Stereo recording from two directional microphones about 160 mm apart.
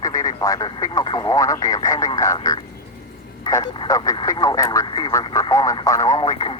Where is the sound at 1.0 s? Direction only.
20° left (ahead or behind).